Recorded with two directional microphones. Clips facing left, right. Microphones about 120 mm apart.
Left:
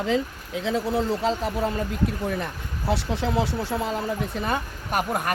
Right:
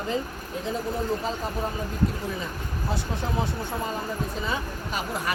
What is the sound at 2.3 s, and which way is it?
Speech, 65° left (ahead or behind).